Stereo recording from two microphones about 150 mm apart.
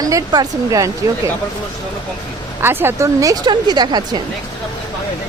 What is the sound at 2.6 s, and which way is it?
Speech, 15° right (ahead or behind).